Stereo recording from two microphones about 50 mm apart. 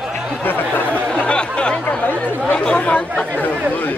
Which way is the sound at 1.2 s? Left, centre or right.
Centre.